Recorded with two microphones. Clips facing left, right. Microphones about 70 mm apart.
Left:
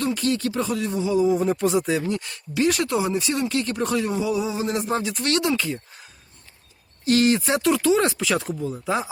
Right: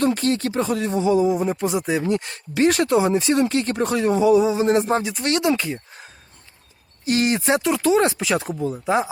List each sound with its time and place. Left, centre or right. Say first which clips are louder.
0.0 s speech: right 3 dB; right
1.3 s speech: left 1 dB; centre
1.9 s speech: right 3 dB; right
5.2 s speech: right 2 dB; right
7.0 s speech: left 1 dB; right